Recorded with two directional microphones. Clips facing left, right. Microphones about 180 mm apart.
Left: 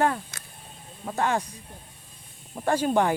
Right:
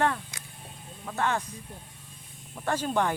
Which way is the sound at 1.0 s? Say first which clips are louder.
Left 4 dB; 30° left (ahead or behind).